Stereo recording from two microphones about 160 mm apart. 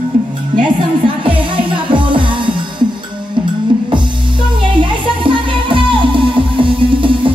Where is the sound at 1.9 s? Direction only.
30° right (ahead or behind).